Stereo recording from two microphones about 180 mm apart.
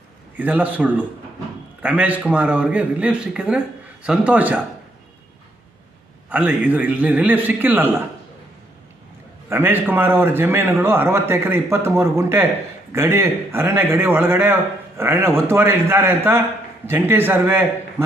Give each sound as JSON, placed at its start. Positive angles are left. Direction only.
{"t": 0.3, "sound": "a man's voice", "side_deg": -10}
{"t": 6.3, "sound": "a man's voice", "side_deg": -10}
{"t": 9.5, "sound": "a man's voice", "side_deg": -10}